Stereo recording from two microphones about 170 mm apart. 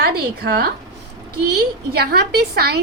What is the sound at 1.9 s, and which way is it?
Speech, 70° right (ahead or behind).